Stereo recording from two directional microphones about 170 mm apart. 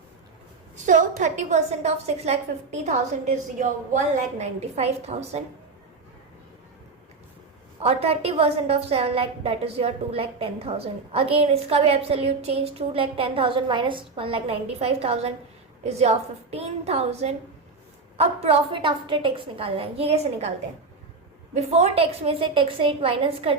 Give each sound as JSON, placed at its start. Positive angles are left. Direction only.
{"t": 0.8, "sound": "a woman's voice", "side_deg": -45}
{"t": 7.8, "sound": "a woman's voice", "side_deg": -35}
{"t": 21.5, "sound": "a woman's voice", "side_deg": -40}